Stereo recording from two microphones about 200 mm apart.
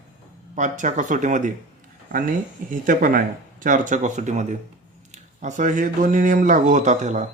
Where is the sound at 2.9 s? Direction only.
45° right (ahead or behind).